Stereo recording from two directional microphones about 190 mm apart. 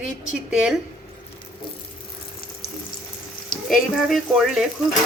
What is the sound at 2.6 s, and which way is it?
Water tap, 30° left (ahead or behind).